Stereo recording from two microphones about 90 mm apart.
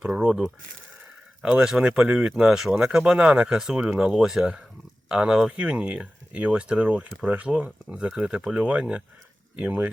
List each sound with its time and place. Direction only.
0.0 s speech: 10° right (ahead or behind)